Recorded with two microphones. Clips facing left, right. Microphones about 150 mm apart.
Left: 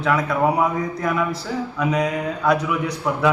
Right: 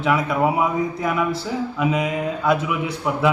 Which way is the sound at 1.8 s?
20° right (ahead or behind).